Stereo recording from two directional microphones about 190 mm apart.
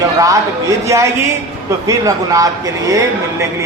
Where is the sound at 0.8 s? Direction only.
15° right (ahead or behind).